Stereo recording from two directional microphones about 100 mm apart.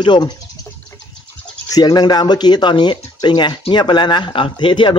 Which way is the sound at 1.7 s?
45° left (ahead or behind).